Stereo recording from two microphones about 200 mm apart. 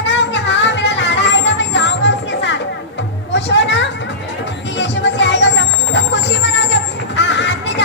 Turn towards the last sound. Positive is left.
turn(degrees=65)  # may be behind; listen again after turning